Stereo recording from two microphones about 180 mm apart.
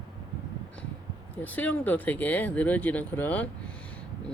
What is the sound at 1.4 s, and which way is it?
Speech, 10° left (ahead or behind).